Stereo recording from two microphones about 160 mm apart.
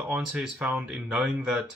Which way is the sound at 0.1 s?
5° right (ahead or behind).